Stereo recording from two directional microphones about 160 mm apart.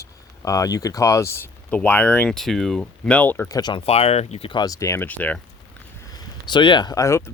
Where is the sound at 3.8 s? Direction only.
40° left (ahead or behind); by 5.4 s 10° left (ahead or behind).